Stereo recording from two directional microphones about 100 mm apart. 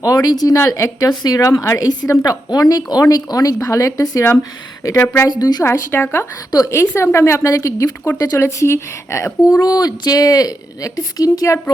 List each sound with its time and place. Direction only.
0.0 s a woman's voice: 35° left (ahead or behind)
5.3 s a woman's voice: 40° left (ahead or behind)
5.9 s a woman's voice: 20° left (ahead or behind)
6.5 s a woman's voice: 35° left (ahead or behind)